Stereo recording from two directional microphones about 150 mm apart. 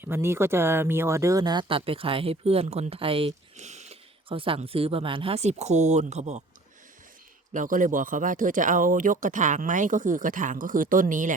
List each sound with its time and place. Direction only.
0.0 s speech: 15° right (ahead or behind); by 6.4 s 50° right (ahead or behind)
7.5 s speech: 60° right (ahead or behind)